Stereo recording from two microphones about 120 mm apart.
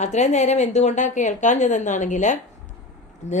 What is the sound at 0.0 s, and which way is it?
A woman's voice, 75° left (ahead or behind).